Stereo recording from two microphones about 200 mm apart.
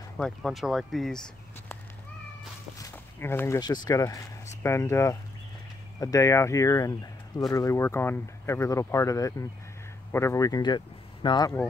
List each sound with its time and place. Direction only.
0.2 s speech: centre (ahead or behind)
2.8 s speech: 10° left (ahead or behind)